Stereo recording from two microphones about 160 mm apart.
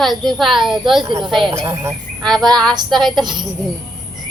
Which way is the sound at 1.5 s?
15° right (ahead or behind).